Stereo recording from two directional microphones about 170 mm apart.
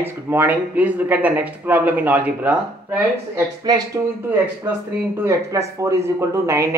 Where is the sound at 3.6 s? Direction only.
20° right (ahead or behind).